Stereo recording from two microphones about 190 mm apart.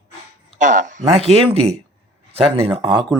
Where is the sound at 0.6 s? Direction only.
40° right (ahead or behind); by 3.1 s 25° right (ahead or behind).